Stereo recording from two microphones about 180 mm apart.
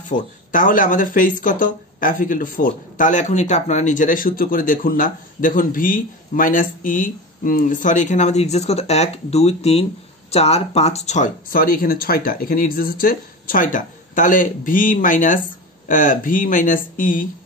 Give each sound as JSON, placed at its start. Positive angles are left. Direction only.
{"t": 0.1, "sound": "speech", "side_deg": 45}